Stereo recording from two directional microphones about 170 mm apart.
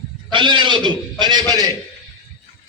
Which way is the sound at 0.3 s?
30° right (ahead or behind).